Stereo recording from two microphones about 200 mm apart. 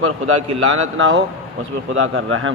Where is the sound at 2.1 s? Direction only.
85° right.